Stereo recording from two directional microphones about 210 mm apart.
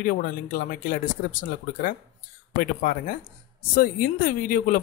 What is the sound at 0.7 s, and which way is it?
Speech, 45° left (ahead or behind).